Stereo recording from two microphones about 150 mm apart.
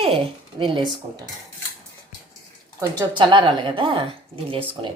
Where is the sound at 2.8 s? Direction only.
30° right (ahead or behind).